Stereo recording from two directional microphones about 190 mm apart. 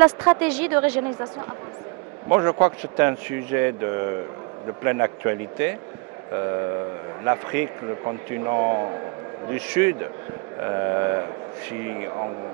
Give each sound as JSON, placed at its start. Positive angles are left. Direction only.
{"t": 0.0, "sound": "a man's voice", "side_deg": -15}